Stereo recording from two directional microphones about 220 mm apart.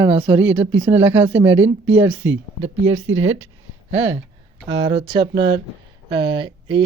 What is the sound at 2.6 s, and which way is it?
Speech, 25° right (ahead or behind).